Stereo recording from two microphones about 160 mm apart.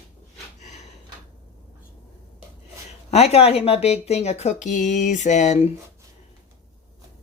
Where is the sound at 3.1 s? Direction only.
40° left (ahead or behind).